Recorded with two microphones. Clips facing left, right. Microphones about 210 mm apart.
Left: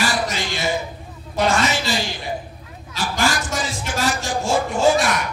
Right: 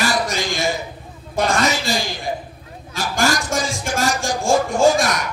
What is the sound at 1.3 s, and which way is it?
Speech, 45° right (ahead or behind).